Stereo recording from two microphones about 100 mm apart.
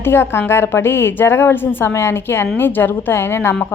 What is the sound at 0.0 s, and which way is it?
A woman's voice, 25° left (ahead or behind).